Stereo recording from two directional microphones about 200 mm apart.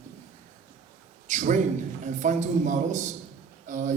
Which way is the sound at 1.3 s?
40° right (ahead or behind).